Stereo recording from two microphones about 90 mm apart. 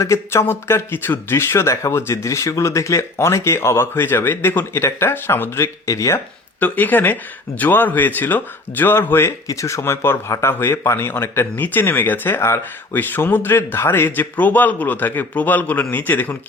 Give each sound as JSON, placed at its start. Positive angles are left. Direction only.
{"t": 0.0, "sound": "speech", "side_deg": 30}
{"t": 6.6, "sound": "speech", "side_deg": 20}
{"t": 9.5, "sound": "speech", "side_deg": 35}